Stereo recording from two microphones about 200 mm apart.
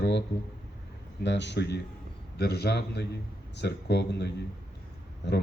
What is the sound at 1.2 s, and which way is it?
A man's voice, 60° left (ahead or behind).